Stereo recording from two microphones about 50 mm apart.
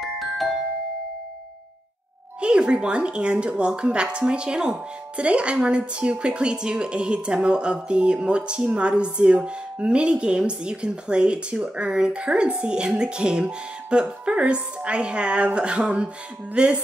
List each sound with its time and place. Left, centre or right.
0.0 s glockenspiel: centre
2.4 s speech: centre